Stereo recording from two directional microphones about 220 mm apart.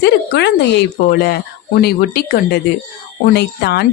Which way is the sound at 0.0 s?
50° left (ahead or behind).